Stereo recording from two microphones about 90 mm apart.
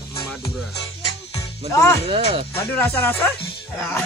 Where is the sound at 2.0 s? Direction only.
90° right.